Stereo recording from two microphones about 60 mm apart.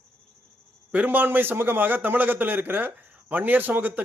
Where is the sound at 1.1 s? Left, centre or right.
Right.